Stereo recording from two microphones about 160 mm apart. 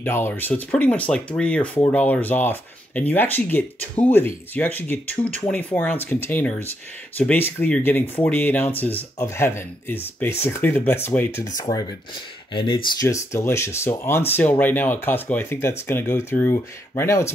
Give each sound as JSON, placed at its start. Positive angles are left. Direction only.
{"t": 0.0, "sound": "speech", "side_deg": 10}
{"t": 13.0, "sound": "speech", "side_deg": 20}